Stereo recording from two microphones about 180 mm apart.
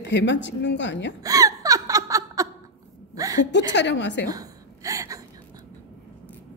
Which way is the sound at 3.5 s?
75° left (ahead or behind).